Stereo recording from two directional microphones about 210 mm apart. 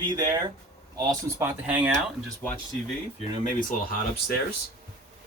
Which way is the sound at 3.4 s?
40° left (ahead or behind).